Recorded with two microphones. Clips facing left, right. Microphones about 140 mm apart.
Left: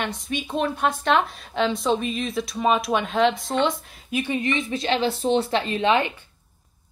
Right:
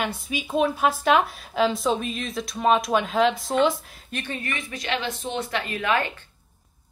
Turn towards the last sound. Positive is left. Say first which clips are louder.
# left 4 dB
turn(degrees=20)  # may be behind; listen again after turning